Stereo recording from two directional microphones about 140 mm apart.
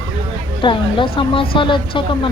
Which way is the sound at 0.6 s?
35° left (ahead or behind).